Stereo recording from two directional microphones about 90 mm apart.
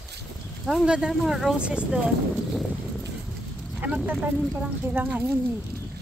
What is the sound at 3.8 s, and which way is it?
Speech, 15° right (ahead or behind).